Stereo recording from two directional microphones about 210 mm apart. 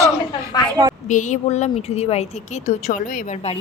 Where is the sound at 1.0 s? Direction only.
35° left (ahead or behind).